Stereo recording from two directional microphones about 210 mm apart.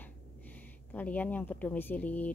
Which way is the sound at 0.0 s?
10° left (ahead or behind).